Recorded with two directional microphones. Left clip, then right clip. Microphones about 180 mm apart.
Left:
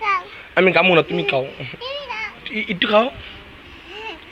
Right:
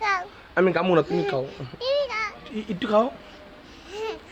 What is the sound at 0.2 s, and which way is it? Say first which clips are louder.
Babbling: left 5 dB; 5° left (ahead or behind).